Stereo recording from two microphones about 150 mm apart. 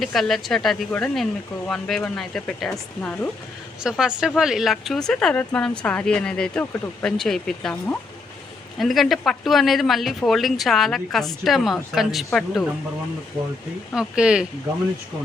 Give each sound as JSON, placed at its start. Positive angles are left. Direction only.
{"t": 0.0, "sound": "speech", "side_deg": 0}
{"t": 13.9, "sound": "speech", "side_deg": -5}